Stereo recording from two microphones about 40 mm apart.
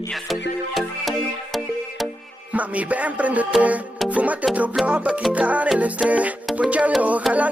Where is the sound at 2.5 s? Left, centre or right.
Right.